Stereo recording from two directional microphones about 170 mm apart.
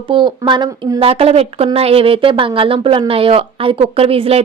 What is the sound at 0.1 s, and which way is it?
Speech, 30° right (ahead or behind).